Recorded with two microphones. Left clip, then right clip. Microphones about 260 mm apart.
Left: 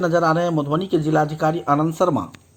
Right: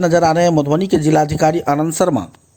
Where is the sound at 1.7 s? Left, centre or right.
Right.